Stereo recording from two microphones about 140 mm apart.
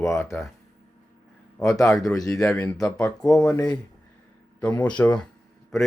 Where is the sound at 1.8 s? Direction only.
Centre (ahead or behind).